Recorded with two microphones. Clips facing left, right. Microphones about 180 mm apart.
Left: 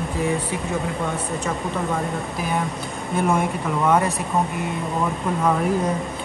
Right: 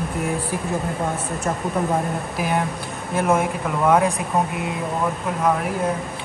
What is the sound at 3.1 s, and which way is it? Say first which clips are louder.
Speech: right 1 dB; 5° right (ahead or behind).